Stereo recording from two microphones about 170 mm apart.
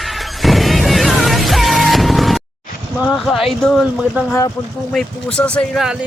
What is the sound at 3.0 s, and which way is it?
Speech, centre (ahead or behind).